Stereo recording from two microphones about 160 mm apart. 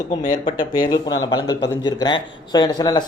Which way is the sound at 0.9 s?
25° left (ahead or behind).